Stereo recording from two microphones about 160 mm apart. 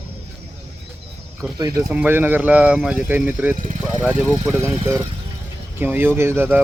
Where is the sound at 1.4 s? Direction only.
Centre (ahead or behind).